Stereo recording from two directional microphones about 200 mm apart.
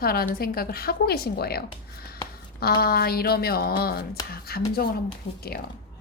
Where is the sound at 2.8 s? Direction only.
50° left (ahead or behind).